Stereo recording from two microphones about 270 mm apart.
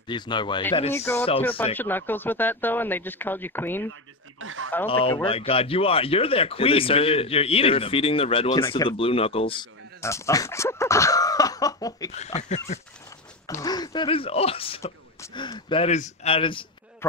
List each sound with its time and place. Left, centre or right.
0.1 s speech: centre
4.4 s a sound: right
4.8 s speech: centre
12.4 s speech: left
13.5 s speech: centre